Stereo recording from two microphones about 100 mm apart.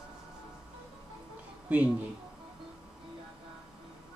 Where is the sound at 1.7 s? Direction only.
15° right (ahead or behind).